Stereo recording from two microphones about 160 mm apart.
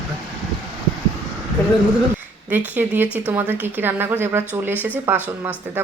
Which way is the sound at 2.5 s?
10° right (ahead or behind).